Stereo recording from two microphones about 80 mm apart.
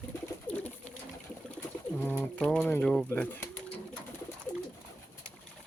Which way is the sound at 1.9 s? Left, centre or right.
Left.